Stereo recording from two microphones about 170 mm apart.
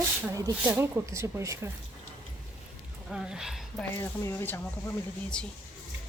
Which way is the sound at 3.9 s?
15° left (ahead or behind).